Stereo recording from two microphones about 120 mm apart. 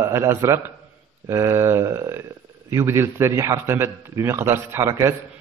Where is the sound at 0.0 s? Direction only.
25° right (ahead or behind).